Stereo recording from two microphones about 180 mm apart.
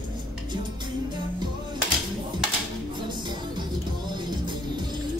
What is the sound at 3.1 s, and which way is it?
Music, 25° right (ahead or behind).